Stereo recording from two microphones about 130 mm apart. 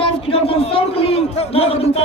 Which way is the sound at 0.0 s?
45° left (ahead or behind).